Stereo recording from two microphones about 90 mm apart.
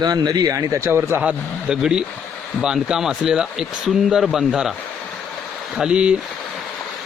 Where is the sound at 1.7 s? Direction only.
5° right (ahead or behind).